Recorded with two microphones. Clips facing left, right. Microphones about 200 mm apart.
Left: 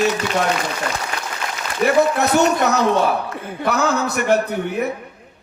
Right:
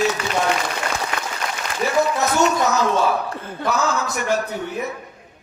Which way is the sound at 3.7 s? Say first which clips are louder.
Left 3 dB; 65° left (ahead or behind).